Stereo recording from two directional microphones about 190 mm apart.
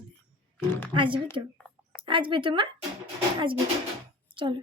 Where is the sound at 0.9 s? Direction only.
25° right (ahead or behind).